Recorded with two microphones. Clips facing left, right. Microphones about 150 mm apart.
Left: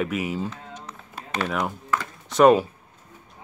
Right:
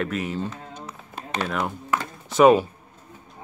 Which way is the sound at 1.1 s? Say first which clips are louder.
Even; 20° right (ahead or behind).